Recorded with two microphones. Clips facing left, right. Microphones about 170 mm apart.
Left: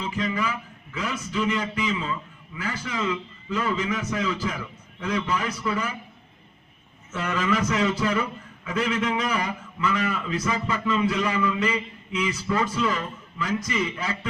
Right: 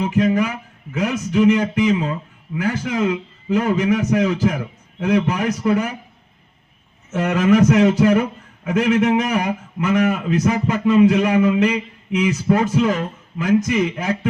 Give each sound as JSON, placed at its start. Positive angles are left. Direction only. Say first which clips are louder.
{"t": 0.0, "sound": "a man's voice", "louder": "right 10 dB", "side_deg": -55}
{"t": 5.4, "sound": "a man's voice", "louder": "right 9 dB", "side_deg": -45}
{"t": 5.6, "sound": "a man's voice", "louder": "right 9 dB", "side_deg": -55}
{"t": 7.3, "sound": "a man's voice", "louder": "right 10 dB", "side_deg": -50}
{"t": 11.4, "sound": "a sound", "louder": "right 9 dB", "side_deg": -65}
{"t": 12.3, "sound": "a man's voice", "louder": "right 9 dB", "side_deg": -50}